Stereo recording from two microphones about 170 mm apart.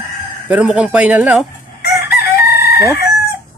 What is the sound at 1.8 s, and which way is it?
Chicken, 70° left (ahead or behind).